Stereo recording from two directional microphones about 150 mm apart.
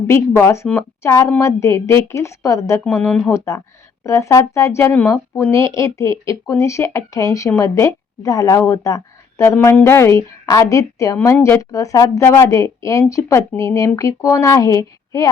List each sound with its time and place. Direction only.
0.1 s speech: 15° left (ahead or behind)
2.9 s speech: 10° left (ahead or behind); by 15.3 s 25° left (ahead or behind)